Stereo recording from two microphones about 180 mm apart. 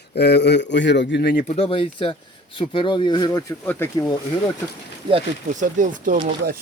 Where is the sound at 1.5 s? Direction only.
30° left (ahead or behind).